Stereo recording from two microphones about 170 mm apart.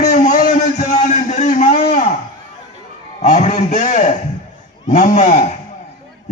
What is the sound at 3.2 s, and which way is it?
A man's voice, 45° left (ahead or behind).